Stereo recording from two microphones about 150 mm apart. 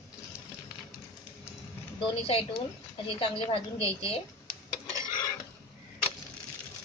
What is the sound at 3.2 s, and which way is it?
Speech, 35° left (ahead or behind).